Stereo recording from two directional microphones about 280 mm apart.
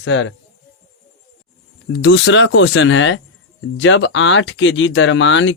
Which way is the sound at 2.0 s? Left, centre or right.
Left.